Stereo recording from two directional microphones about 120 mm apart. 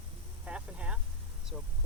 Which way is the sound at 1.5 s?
5° left (ahead or behind).